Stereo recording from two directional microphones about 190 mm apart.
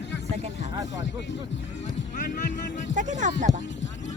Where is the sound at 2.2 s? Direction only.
45° left (ahead or behind).